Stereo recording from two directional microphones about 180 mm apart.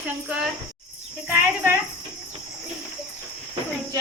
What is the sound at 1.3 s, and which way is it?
Speech, 10° right (ahead or behind).